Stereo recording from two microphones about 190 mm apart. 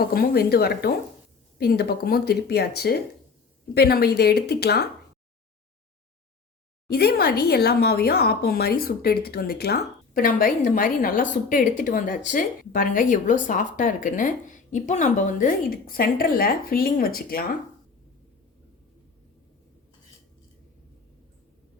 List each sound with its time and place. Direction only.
0.0 s speech: 55° left (ahead or behind)
6.8 s speech: 55° left (ahead or behind)